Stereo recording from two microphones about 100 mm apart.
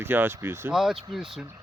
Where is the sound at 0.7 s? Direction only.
5° right (ahead or behind).